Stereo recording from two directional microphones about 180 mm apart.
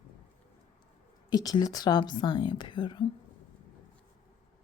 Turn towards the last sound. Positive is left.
turn(degrees=25)  # may be behind; listen again after turning